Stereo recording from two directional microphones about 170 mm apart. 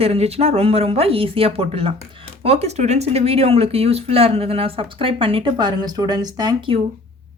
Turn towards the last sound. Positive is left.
turn(degrees=-30)  # may be behind; listen again after turning